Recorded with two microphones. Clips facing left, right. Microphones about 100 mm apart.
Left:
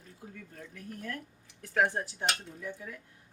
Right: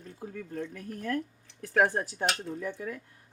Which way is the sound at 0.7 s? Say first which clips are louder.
Right 4 dB; 55° right (ahead or behind).